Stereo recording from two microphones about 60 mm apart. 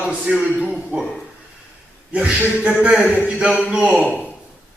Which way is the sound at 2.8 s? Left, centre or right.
Right.